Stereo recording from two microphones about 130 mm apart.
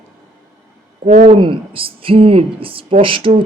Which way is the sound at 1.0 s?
60° right (ahead or behind).